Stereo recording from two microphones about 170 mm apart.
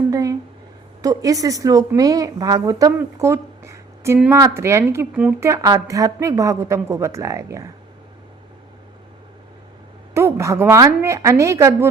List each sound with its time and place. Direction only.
0.1 s a sound: 20° right (ahead or behind)
1.0 s a woman's voice: 20° right (ahead or behind)
10.2 s a woman's voice: 15° right (ahead or behind)